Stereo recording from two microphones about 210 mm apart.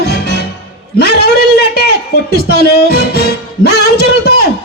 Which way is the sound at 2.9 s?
45° left (ahead or behind).